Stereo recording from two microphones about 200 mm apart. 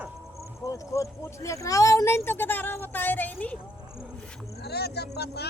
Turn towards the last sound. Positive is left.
turn(degrees=55)  # may be behind; listen again after turning